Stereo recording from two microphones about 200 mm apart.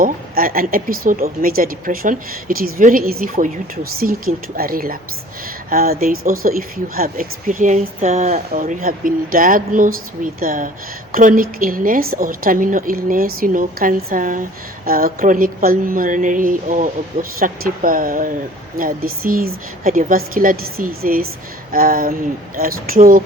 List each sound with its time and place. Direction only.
0.0 s speech: 45° right (ahead or behind)
4.5 s speech: 45° right (ahead or behind)